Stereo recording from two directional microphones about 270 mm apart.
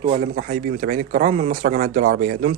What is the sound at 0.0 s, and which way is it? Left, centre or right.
Speech, right.